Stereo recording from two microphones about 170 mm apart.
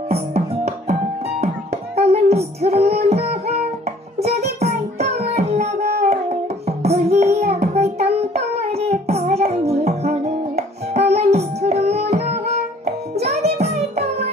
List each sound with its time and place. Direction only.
2.0 s music: 35° right (ahead or behind)
4.2 s child singing: 40° right (ahead or behind)
6.8 s music: 40° right (ahead or behind)
8.0 s child singing: 40° right (ahead or behind)
12.8 s music: 40° right (ahead or behind)
13.6 s child singing: 40° right (ahead or behind)